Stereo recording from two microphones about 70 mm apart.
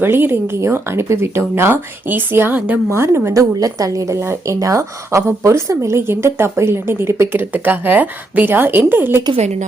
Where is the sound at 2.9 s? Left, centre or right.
Right.